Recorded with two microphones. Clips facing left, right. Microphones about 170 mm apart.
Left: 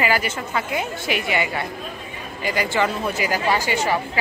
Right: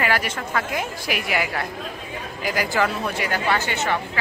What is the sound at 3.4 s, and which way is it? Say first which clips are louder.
Speech: left 2 dB; 10° left (ahead or behind).